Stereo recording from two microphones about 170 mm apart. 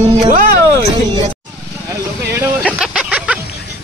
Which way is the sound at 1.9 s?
15° right (ahead or behind).